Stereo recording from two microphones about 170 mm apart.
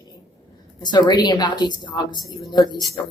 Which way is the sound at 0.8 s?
25° left (ahead or behind).